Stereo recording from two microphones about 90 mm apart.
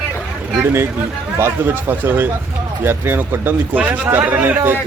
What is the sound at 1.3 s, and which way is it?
A man's voice, 25° right (ahead or behind).